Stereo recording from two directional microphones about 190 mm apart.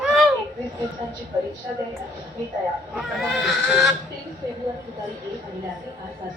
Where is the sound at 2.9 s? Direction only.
Centre (ahead or behind).